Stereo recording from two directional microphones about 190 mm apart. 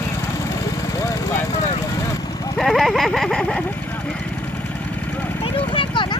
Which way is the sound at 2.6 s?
Centre (ahead or behind).